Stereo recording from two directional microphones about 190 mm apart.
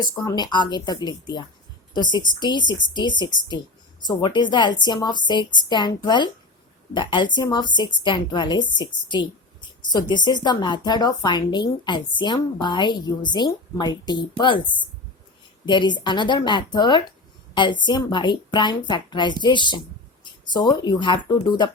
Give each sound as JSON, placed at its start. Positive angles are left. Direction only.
{"t": 0.0, "sound": "speech", "side_deg": 20}